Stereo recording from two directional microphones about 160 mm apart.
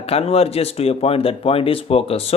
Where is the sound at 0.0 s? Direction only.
40° left (ahead or behind).